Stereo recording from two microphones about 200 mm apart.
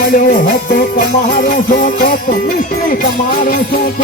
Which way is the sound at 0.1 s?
45° left (ahead or behind).